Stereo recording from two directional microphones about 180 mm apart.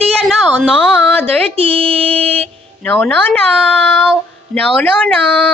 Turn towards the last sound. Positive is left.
turn(degrees=5)  # may be behind; listen again after turning